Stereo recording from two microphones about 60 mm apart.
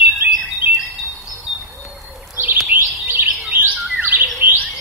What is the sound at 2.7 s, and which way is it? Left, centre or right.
Bird, right.